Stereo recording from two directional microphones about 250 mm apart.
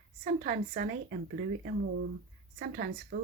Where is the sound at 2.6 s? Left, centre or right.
Right.